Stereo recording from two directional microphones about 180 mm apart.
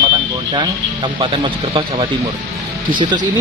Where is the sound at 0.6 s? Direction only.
25° right (ahead or behind).